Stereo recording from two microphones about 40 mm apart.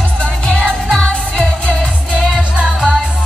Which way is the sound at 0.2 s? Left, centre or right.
Left.